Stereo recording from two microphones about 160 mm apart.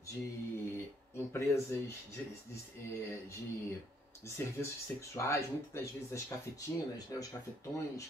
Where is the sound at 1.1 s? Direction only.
15° left (ahead or behind).